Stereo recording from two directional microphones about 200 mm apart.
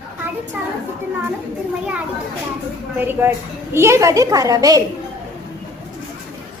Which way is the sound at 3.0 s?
10° right (ahead or behind).